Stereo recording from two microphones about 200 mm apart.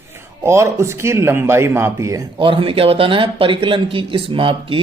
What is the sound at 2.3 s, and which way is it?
Speech, 25° right (ahead or behind).